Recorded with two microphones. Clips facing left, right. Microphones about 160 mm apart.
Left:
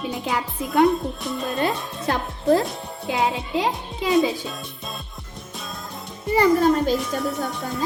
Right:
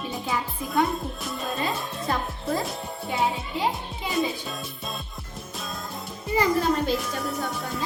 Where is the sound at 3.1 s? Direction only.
90° left.